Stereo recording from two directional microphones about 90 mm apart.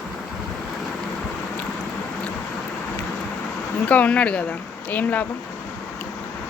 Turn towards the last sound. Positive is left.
turn(degrees=20)  # may be behind; listen again after turning